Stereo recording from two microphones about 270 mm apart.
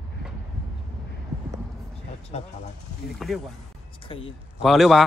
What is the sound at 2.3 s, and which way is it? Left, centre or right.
Speech, left.